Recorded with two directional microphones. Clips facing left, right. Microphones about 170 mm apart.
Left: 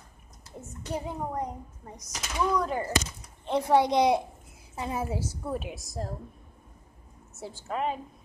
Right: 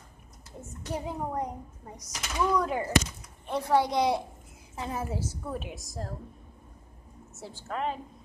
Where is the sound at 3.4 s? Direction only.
20° left (ahead or behind).